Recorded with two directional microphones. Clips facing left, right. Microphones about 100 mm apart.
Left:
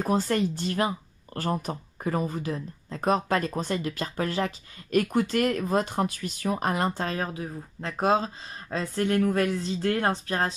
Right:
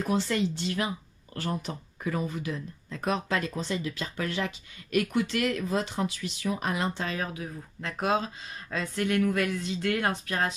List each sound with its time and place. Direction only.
0.0 s speech: 45° left (ahead or behind)